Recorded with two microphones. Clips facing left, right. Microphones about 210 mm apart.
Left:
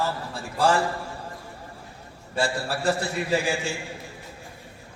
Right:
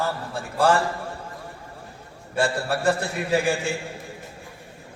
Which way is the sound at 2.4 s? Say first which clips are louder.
Right 3 dB; 55° right (ahead or behind).